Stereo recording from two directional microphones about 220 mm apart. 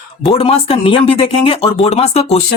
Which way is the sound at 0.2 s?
25° left (ahead or behind).